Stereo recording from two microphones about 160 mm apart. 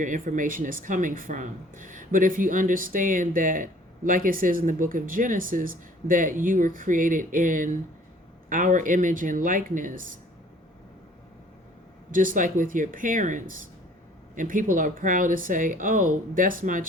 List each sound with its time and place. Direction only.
0.0 s speech: 55° right (ahead or behind)
12.1 s speech: 55° right (ahead or behind)